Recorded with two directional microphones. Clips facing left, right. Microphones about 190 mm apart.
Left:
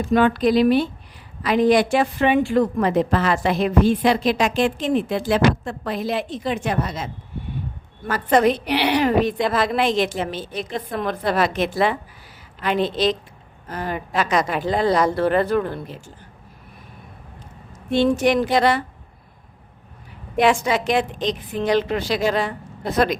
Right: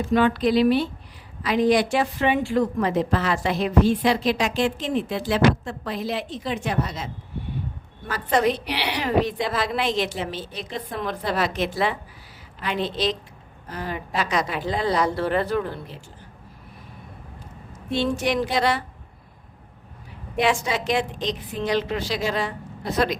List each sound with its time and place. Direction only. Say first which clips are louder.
0.1 s a woman's voice: left 3 dB; 50° left (ahead or behind)
17.9 s a woman's voice: left 6 dB; 50° left (ahead or behind)
20.4 s a woman's voice: left 4 dB; 55° left (ahead or behind)